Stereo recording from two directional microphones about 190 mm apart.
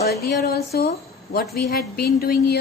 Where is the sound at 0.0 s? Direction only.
55° left (ahead or behind).